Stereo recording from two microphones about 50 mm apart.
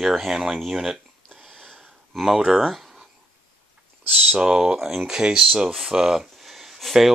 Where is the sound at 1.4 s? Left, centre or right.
Centre.